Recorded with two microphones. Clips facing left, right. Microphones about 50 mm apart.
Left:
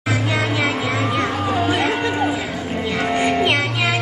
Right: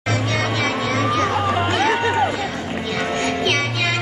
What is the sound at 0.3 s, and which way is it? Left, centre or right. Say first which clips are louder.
Music: left 2 dB; centre.